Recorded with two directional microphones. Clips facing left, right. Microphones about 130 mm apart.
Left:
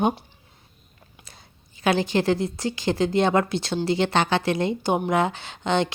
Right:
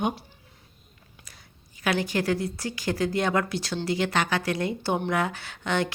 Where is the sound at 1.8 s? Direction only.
25° left (ahead or behind).